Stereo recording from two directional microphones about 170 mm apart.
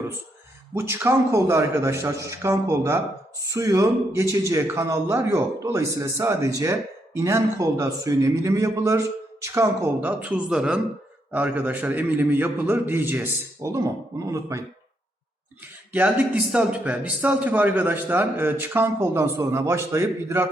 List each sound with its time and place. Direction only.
0.7 s speech: 15° right (ahead or behind)
15.9 s speech: 10° right (ahead or behind)